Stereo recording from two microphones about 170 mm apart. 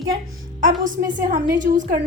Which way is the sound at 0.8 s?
50° right (ahead or behind).